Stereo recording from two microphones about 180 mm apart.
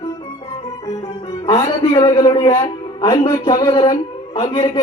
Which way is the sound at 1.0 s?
25° left (ahead or behind).